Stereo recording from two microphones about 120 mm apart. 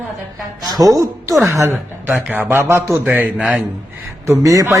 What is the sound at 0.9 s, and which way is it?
Speech, 30° right (ahead or behind).